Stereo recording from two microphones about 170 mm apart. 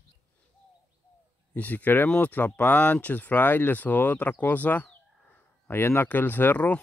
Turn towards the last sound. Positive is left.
turn(degrees=10)  # may be behind; listen again after turning